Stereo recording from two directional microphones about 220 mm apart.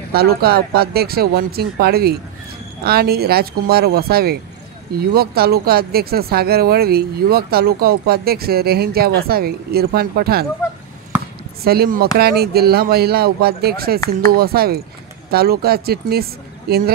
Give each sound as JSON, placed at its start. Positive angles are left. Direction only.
{"t": 0.1, "sound": "speech", "side_deg": -45}
{"t": 11.6, "sound": "speech", "side_deg": -45}